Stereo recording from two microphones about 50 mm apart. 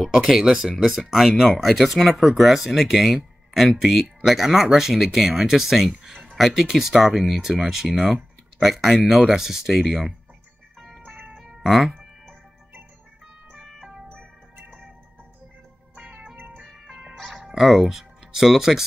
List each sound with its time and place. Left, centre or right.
0.1 s speech: centre
9.0 s speech: centre
11.1 s music: right
16.4 s music: right
17.2 s music: centre